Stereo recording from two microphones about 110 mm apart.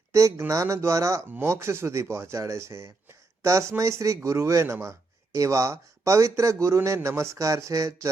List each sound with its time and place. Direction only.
0.1 s speech: 30° right (ahead or behind)